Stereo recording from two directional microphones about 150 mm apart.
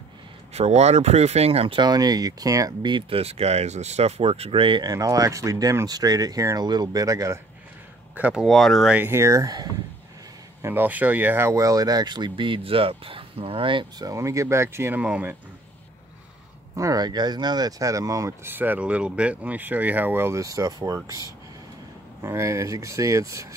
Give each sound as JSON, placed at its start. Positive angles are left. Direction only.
{"t": 0.5, "sound": "speech", "side_deg": -45}
{"t": 8.2, "sound": "speech", "side_deg": -5}
{"t": 8.9, "sound": "speech", "side_deg": -15}
{"t": 10.6, "sound": "speech", "side_deg": -15}
{"t": 16.7, "sound": "speech", "side_deg": -25}
{"t": 22.2, "sound": "speech", "side_deg": -20}